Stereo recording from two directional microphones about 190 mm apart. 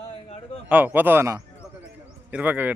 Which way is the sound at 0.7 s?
10° right (ahead or behind).